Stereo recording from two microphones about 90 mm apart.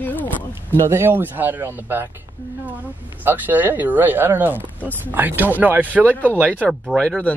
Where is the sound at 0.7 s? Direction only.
25° right (ahead or behind).